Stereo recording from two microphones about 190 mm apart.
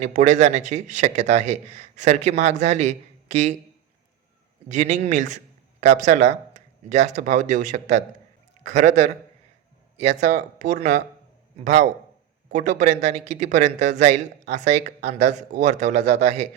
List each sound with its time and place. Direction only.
0.0 s speech: 40° right (ahead or behind)
4.7 s speech: 40° right (ahead or behind)